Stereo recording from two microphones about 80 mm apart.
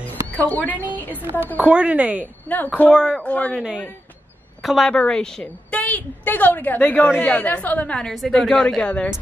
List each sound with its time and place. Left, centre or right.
0.0 s a sound: left
1.3 s a woman's voice: left
1.6 s speech: centre
2.5 s a woman's voice: left
2.9 s a woman's voice: centre
3.2 s speech: centre
4.6 s a woman's voice: centre
8.0 s a woman's voice: centre